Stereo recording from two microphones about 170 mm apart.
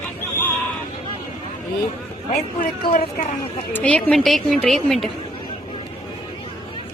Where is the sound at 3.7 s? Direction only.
10° left (ahead or behind).